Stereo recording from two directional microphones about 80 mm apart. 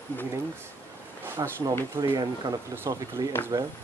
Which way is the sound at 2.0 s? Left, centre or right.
Right.